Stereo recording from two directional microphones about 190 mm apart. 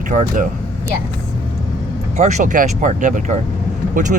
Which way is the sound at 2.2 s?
40° right (ahead or behind).